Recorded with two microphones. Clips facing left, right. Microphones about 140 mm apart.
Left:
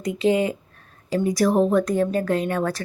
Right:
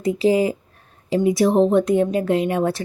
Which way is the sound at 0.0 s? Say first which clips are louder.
Right 3 dB; 30° right (ahead or behind).